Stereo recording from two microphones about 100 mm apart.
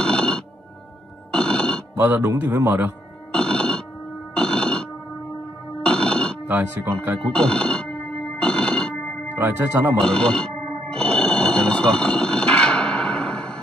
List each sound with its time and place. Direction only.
0.0 s music: 10° left (ahead or behind)
2.0 s a man's voice: 25° right (ahead or behind)
3.3 s music: 10° left (ahead or behind)
6.4 s a man's voice: 20° right (ahead or behind)
7.3 s speech: 10° left (ahead or behind)
8.4 s music: 10° left (ahead or behind)
9.3 s a man's voice: 20° right (ahead or behind)
10.0 s music: 10° left (ahead or behind)